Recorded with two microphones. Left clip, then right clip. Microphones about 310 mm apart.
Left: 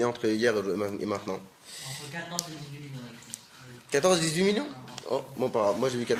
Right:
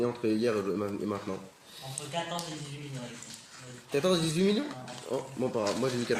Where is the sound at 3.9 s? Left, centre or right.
Left.